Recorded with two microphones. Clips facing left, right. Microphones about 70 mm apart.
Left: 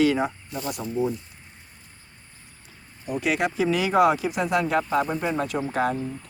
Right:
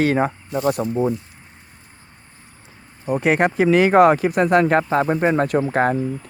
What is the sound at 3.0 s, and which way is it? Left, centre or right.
Speech, right.